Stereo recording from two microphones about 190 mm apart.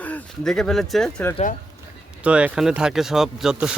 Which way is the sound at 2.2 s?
5° right (ahead or behind).